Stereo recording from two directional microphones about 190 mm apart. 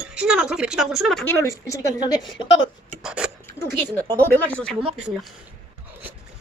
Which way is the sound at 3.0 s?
5° right (ahead or behind).